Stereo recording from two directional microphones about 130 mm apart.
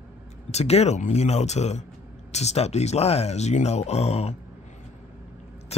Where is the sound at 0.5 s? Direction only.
55° left (ahead or behind).